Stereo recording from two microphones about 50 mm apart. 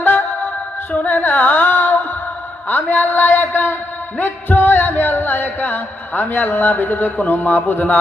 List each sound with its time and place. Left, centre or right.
0.0 s music: left
0.9 s a sound: left
2.6 s music: left